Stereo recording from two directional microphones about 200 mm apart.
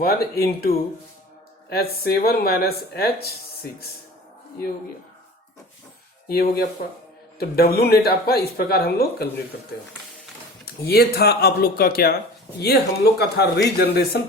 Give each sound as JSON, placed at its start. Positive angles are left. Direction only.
{"t": 0.0, "sound": "speech", "side_deg": 50}
{"t": 1.7, "sound": "speech", "side_deg": 50}
{"t": 6.2, "sound": "speech", "side_deg": 50}
{"t": 10.8, "sound": "speech", "side_deg": 50}